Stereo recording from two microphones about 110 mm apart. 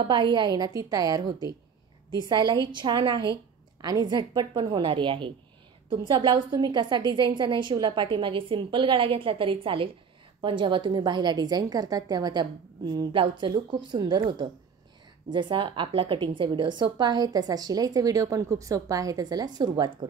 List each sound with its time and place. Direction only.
0.0 s a woman's voice: 45° right (ahead or behind)